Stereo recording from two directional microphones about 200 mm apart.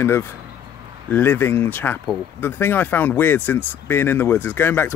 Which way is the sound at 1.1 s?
10° left (ahead or behind).